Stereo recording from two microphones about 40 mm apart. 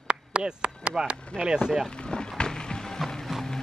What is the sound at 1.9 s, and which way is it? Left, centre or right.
Music, left.